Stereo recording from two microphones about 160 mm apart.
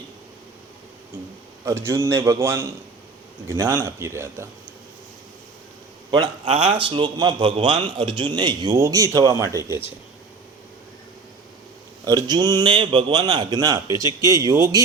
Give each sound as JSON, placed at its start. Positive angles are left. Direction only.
{"t": 1.6, "sound": "a man's voice", "side_deg": -15}
{"t": 6.1, "sound": "a man's voice", "side_deg": -30}
{"t": 12.0, "sound": "a man's voice", "side_deg": -25}